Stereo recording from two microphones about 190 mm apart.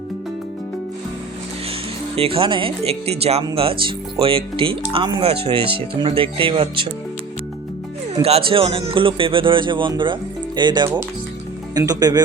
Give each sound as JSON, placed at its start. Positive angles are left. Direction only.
{"t": 2.1, "sound": "speech", "side_deg": -30}
{"t": 8.2, "sound": "speech", "side_deg": -30}